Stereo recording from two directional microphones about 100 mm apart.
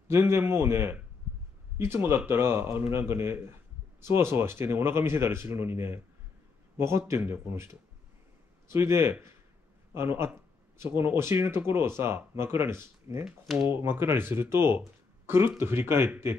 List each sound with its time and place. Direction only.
0.1 s speech: 25° right (ahead or behind)